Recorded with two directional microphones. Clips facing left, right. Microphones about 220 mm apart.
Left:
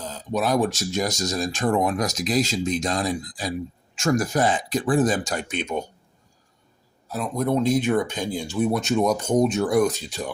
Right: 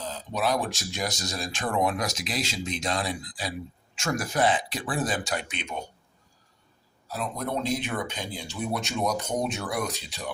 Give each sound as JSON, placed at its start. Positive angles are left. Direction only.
{"t": 0.1, "sound": "speech", "side_deg": 45}
{"t": 7.1, "sound": "speech", "side_deg": 50}